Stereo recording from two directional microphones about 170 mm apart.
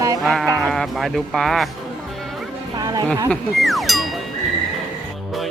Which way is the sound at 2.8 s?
25° right (ahead or behind).